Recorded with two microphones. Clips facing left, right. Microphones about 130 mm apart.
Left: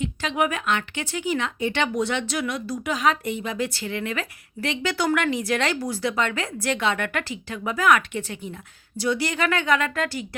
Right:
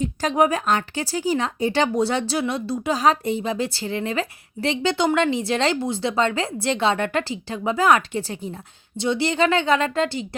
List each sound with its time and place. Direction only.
0.0 s speech: 40° right (ahead or behind)